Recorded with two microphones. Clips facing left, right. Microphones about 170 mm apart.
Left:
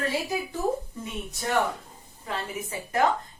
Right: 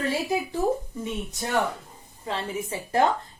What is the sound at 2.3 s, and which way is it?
Speech, 30° right (ahead or behind).